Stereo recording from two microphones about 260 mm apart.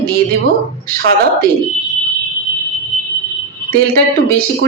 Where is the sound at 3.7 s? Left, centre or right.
Right.